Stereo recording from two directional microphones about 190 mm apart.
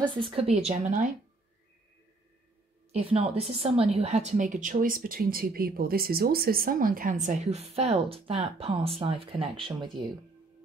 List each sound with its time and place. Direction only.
0.0 s a woman's voice: 25° right (ahead or behind)
2.9 s a woman's voice: 30° right (ahead or behind)